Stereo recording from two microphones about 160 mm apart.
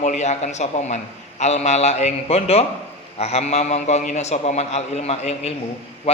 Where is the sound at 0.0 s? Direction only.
45° left (ahead or behind).